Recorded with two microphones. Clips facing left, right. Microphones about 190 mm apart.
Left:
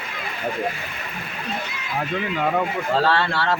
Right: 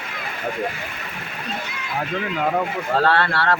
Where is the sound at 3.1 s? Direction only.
60° right (ahead or behind).